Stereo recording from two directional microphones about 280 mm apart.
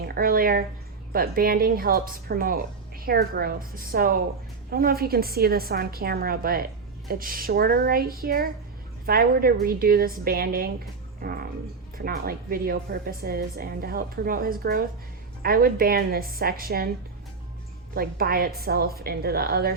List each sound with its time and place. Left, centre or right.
0.0 s speech: right
11.9 s speech: right
17.9 s speech: right